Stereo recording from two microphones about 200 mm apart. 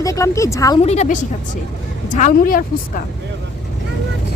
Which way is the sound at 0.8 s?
35° left (ahead or behind).